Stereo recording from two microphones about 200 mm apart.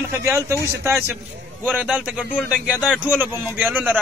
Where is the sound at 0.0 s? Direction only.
10° right (ahead or behind); by 3.0 s 5° left (ahead or behind).